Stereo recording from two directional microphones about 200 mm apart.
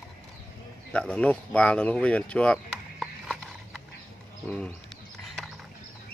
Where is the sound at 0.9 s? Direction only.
5° left (ahead or behind).